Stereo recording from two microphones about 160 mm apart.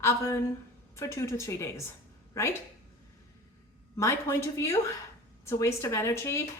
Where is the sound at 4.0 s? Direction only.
15° left (ahead or behind).